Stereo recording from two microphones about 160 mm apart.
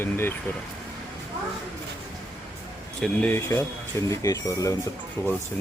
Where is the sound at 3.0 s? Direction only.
10° left (ahead or behind).